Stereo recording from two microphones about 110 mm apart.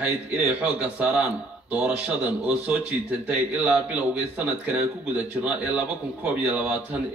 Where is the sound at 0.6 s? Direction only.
10° right (ahead or behind).